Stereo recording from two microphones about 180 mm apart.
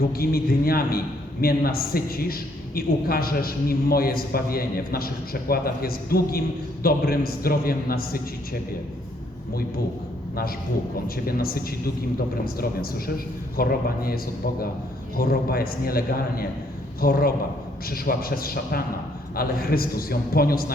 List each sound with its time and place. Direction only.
0.0 s a man's voice: 55° left (ahead or behind)
10.9 s a man's voice: 55° left (ahead or behind)